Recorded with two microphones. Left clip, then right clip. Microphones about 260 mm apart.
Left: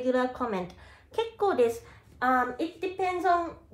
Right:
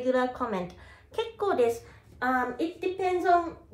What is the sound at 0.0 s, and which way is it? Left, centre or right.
A woman's voice, centre.